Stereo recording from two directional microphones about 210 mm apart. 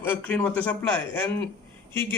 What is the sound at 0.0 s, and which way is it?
Speech, 10° left (ahead or behind).